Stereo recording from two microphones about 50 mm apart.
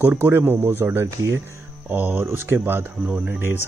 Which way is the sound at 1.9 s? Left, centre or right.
Right.